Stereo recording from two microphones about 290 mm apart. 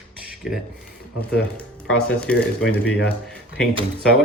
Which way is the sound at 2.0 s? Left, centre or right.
Centre.